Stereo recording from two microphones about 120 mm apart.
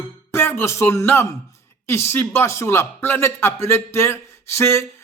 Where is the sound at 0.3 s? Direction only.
20° left (ahead or behind).